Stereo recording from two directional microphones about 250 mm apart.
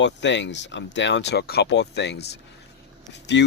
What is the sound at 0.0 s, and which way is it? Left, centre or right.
Speech, left.